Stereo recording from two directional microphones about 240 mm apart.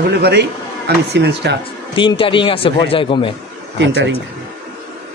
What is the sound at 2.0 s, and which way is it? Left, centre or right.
A man's voice, left.